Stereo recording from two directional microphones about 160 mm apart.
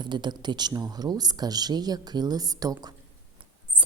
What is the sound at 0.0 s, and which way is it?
Speech, 30° right (ahead or behind).